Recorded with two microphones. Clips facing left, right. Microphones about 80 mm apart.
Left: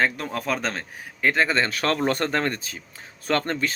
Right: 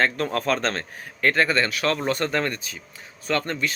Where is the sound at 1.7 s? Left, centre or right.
Left.